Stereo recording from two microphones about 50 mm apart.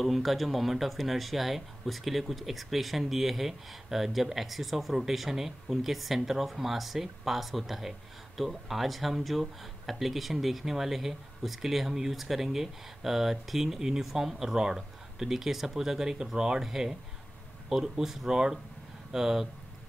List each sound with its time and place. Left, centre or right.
0.0 s speech: centre